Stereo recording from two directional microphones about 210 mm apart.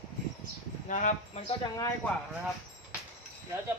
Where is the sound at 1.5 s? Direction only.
20° left (ahead or behind).